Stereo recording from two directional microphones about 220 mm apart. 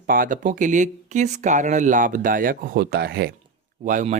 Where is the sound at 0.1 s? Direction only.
40° right (ahead or behind).